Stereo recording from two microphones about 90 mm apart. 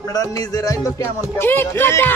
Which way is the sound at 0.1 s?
45° left (ahead or behind).